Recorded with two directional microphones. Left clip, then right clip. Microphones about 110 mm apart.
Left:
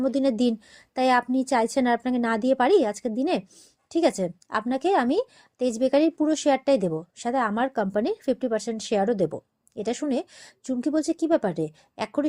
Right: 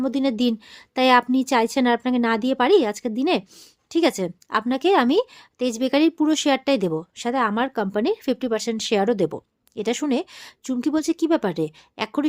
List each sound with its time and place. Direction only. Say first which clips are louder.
0.0 s a woman's voice: right 1 dB; 10° right (ahead or behind)
0.7 s a woman's voice: right 6 dB; 30° right (ahead or behind)